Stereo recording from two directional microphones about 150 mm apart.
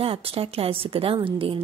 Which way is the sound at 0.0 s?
40° right (ahead or behind).